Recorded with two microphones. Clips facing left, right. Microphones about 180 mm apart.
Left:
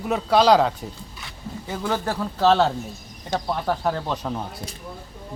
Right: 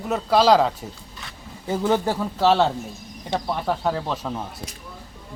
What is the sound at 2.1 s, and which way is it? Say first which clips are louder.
Speech: even; 5° right (ahead or behind).